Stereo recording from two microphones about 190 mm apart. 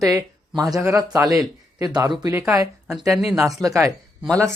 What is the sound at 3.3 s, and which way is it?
Speech, 15° right (ahead or behind).